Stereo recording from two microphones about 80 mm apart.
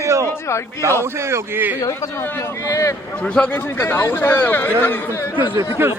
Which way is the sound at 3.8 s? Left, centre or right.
Left.